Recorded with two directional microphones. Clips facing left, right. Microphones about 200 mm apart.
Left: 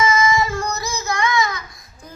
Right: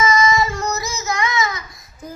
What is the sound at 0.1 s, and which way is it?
Child singing, 20° right (ahead or behind).